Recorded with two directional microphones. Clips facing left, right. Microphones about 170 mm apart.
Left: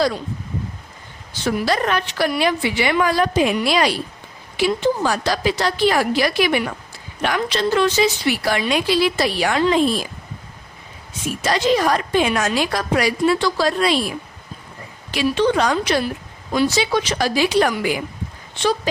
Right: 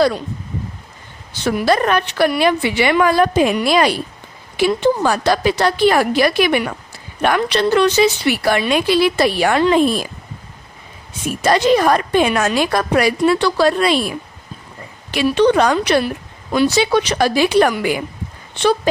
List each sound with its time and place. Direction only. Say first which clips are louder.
1.5 s a woman's voice: right 4 dB; 55° right (ahead or behind)
11.4 s a woman's voice: right 4 dB; 55° right (ahead or behind)
15.1 s a woman's voice: right 4 dB; 65° right (ahead or behind)